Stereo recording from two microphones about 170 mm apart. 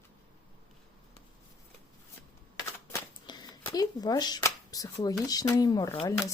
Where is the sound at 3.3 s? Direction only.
25° left (ahead or behind).